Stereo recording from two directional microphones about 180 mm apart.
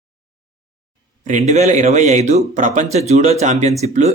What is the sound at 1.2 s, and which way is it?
Speech, 40° right (ahead or behind).